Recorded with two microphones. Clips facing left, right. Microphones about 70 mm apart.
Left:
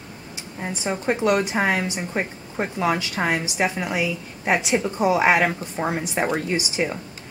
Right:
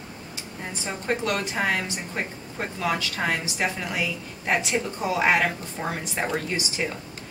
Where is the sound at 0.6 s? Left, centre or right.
Centre.